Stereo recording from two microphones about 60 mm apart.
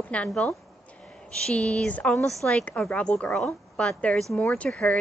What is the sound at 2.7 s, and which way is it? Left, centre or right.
Speech, left.